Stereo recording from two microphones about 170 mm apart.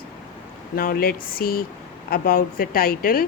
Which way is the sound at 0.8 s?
60° left (ahead or behind).